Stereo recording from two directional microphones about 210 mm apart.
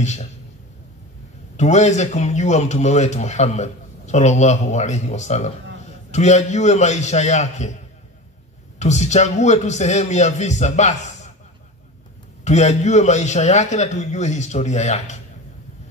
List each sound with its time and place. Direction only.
0.0 s a man's voice: 35° left (ahead or behind)
1.6 s a man's voice: 35° left (ahead or behind)
8.7 s a man's voice: 35° left (ahead or behind)
12.4 s a man's voice: 35° left (ahead or behind)